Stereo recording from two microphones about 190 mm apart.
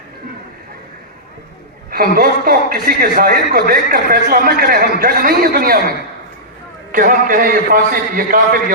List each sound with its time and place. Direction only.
1.9 s a man's voice: 50° right (ahead or behind)
6.9 s a man's voice: 45° right (ahead or behind)